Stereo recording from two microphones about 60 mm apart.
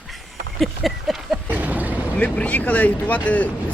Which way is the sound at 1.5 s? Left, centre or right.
Right.